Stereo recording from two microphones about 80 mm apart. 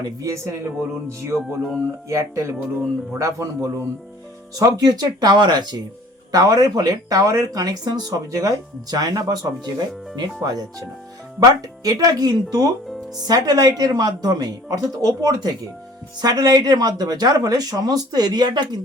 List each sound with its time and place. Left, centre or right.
0.0 s a man's voice: right
6.3 s speech: right